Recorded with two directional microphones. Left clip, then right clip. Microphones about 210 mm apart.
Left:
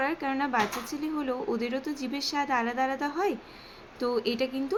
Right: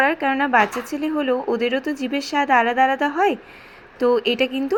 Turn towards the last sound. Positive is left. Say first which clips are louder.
# right 9 dB
turn(degrees=-15)  # may be behind; listen again after turning